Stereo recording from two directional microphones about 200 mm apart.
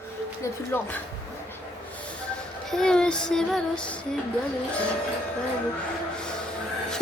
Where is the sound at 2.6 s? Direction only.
5° left (ahead or behind).